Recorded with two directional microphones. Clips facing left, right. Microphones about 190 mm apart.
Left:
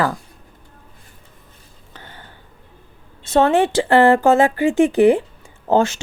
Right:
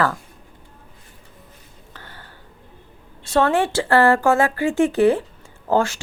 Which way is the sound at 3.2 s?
20° left (ahead or behind).